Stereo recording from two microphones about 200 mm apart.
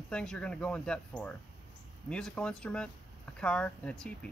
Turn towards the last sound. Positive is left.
turn(degrees=5)  # may be behind; listen again after turning